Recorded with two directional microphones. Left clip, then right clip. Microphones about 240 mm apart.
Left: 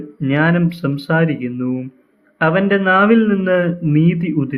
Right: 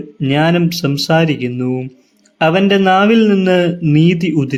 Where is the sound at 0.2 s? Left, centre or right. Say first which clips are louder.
Right 3 dB; right.